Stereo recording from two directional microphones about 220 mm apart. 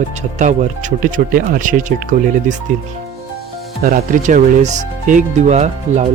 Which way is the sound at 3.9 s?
40° right (ahead or behind).